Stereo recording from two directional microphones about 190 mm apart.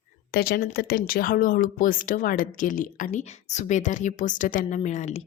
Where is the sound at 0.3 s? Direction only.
55° left (ahead or behind); by 5.2 s 40° left (ahead or behind).